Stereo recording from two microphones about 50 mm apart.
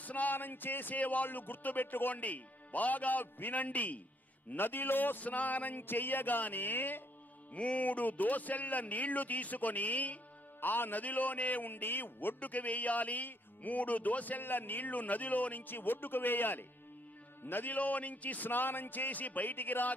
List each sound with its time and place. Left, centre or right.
0.0 s speech: left
4.6 s speech: left
7.5 s speech: left
12.4 s speech: left